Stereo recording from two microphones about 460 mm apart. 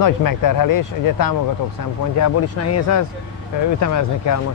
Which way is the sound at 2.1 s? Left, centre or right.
Left.